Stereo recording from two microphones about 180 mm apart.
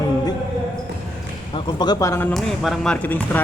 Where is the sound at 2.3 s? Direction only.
Centre (ahead or behind).